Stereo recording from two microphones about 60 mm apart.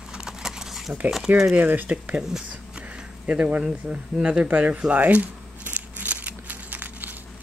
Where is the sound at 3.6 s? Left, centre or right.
Centre.